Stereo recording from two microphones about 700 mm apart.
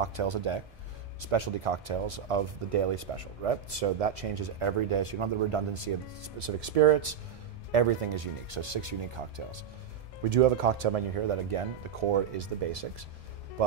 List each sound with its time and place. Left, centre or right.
0.0 s speech: right
10.3 s speech: right